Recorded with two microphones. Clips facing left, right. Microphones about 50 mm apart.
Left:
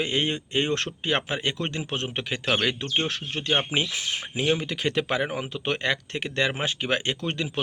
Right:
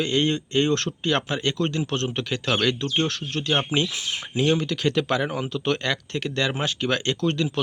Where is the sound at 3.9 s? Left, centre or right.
Left.